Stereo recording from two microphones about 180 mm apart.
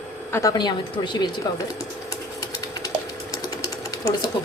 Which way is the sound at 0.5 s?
25° left (ahead or behind).